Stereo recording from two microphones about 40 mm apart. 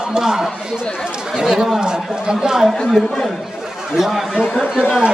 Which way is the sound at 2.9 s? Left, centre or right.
Centre.